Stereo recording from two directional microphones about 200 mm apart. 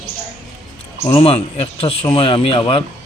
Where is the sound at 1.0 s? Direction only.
30° left (ahead or behind).